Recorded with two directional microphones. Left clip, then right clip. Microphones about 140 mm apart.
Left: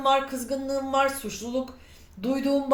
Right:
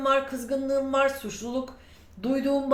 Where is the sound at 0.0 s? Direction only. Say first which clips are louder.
Left 1 dB; 25° left (ahead or behind).